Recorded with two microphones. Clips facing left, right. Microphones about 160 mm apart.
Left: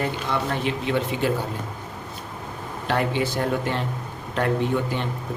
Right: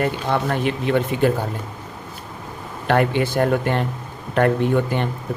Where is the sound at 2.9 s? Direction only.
55° right (ahead or behind).